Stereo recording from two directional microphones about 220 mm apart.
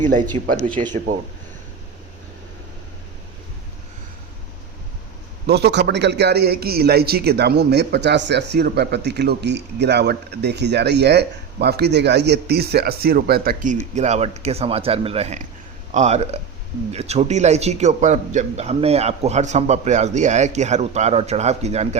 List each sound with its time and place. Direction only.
0.0 s a man's voice: 35° right (ahead or behind)
5.5 s a man's voice: 50° right (ahead or behind); by 21.8 s 30° right (ahead or behind)